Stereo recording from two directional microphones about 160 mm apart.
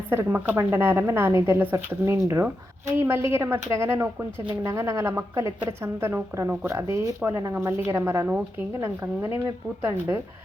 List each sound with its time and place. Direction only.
0.1 s a woman's voice: 15° right (ahead or behind)